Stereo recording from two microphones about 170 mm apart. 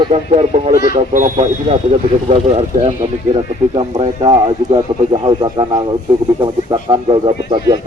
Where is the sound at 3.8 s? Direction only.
30° right (ahead or behind).